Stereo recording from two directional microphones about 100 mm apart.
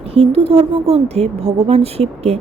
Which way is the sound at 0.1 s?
85° right.